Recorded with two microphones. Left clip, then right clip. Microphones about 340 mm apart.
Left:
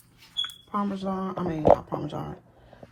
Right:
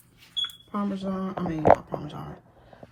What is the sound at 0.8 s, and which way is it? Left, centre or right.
A woman's voice, centre.